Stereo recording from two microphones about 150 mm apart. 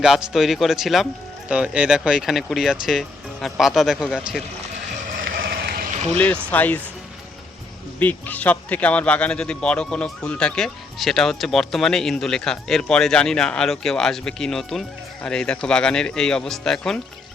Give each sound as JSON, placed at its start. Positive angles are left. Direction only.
{"t": 0.0, "sound": "speech", "side_deg": -5}
{"t": 5.1, "sound": "a sound", "side_deg": -80}
{"t": 6.1, "sound": "speech", "side_deg": 10}
{"t": 7.9, "sound": "speech", "side_deg": 10}